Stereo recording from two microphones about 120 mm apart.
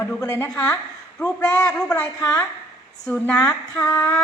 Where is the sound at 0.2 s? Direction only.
30° left (ahead or behind).